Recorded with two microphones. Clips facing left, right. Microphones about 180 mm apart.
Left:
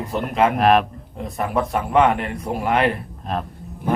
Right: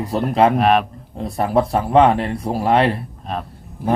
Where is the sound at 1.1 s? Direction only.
35° right (ahead or behind).